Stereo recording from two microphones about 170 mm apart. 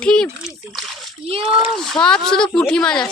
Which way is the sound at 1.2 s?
35° right (ahead or behind).